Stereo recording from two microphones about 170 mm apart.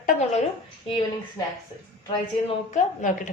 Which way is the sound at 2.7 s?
45° left (ahead or behind).